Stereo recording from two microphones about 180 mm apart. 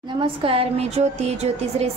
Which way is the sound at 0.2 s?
30° right (ahead or behind).